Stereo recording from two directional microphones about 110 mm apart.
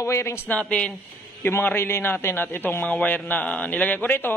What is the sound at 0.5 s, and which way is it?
Speech, 10° left (ahead or behind).